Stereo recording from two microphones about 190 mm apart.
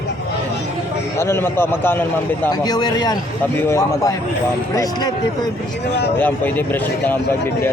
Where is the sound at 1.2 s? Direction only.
15° left (ahead or behind).